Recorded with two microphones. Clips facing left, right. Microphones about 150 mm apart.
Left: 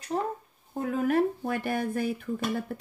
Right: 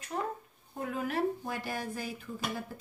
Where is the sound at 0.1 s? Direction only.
30° left (ahead or behind).